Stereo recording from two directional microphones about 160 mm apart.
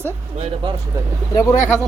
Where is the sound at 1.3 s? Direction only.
20° left (ahead or behind).